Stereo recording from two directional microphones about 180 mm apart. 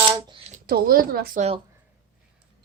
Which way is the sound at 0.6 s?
55° right (ahead or behind).